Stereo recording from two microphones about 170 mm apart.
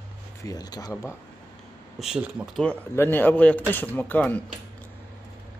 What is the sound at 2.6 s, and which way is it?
Speech, 15° left (ahead or behind).